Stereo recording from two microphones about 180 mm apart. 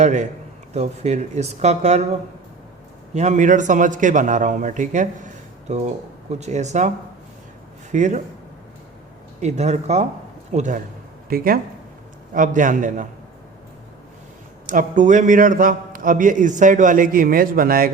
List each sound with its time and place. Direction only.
0.0 s a man's voice: 40° right (ahead or behind)
3.2 s a man's voice: 40° right (ahead or behind)
9.4 s a man's voice: 40° right (ahead or behind)
11.3 s a man's voice: 55° right (ahead or behind)
14.7 s a man's voice: 45° right (ahead or behind)